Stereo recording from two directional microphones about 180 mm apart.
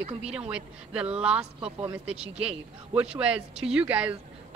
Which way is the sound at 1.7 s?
30° right (ahead or behind).